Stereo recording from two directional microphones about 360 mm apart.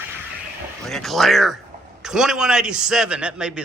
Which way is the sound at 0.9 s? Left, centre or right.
Centre.